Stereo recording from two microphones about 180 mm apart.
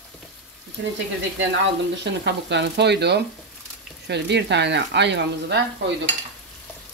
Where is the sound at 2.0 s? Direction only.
75° right (ahead or behind).